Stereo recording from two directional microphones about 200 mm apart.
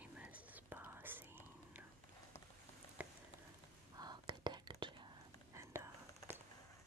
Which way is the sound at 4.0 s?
20° right (ahead or behind).